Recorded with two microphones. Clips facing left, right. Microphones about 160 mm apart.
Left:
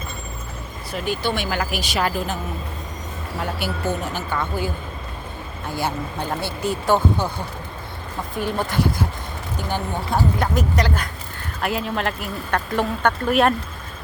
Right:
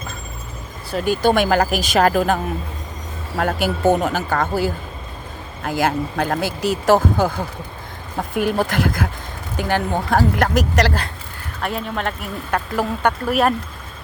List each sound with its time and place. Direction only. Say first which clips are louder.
0.9 s speech: right 7 dB; 40° right (ahead or behind); by 2.4 s 55° right (ahead or behind)
3.6 s speech: right 10 dB; 50° right (ahead or behind)
5.6 s speech: right 6 dB; 90° right
8.7 s speech: right 1 dB; 90° right
11.6 s speech: even; centre (ahead or behind)